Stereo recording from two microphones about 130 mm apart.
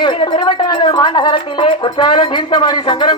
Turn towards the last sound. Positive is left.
turn(degrees=40)  # may be behind; listen again after turning